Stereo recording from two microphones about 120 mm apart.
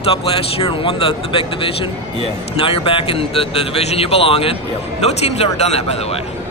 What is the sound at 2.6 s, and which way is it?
A man's voice, 45° left (ahead or behind).